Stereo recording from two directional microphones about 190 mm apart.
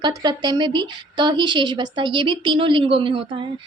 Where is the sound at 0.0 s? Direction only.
20° right (ahead or behind).